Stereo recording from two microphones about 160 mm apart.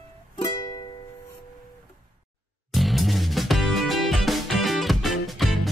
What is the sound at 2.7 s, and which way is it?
Music, centre (ahead or behind).